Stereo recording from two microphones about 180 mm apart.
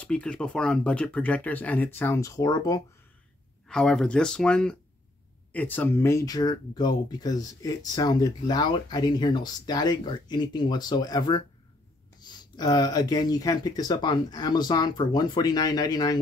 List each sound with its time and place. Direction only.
0.0 s speech: 5° left (ahead or behind)
3.6 s speech: 5° left (ahead or behind); by 16.2 s 20° left (ahead or behind)